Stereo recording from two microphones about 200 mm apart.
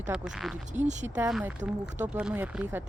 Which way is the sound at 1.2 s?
5° right (ahead or behind).